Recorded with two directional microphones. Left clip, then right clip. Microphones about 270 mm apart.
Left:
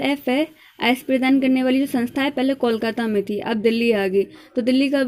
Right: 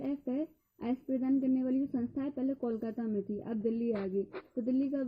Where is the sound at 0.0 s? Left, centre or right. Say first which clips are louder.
Left 16 dB; left.